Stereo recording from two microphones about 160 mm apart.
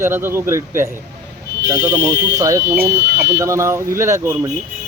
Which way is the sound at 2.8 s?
80° right.